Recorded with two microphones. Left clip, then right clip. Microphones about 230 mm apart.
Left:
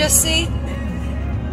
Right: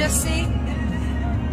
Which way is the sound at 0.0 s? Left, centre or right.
Centre.